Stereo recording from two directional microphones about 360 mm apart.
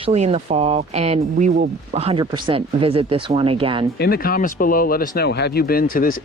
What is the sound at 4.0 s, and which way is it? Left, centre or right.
Speech, left.